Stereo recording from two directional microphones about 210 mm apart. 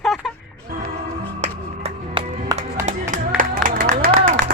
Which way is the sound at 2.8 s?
40° right (ahead or behind).